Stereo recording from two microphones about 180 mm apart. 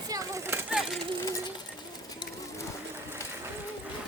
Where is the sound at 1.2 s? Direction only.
20° left (ahead or behind).